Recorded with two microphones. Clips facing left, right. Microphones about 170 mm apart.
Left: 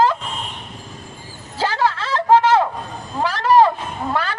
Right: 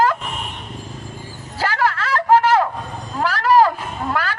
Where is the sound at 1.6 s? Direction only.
20° left (ahead or behind).